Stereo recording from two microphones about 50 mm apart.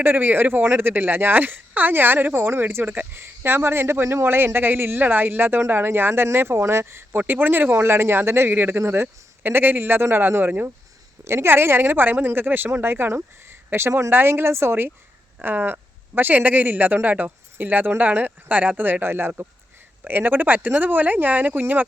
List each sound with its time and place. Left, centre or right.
0.0 s speech: right
7.2 s speech: right
8.4 s speech: right
11.3 s speech: right